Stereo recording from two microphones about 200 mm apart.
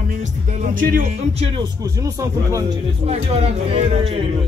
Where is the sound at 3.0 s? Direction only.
30° right (ahead or behind).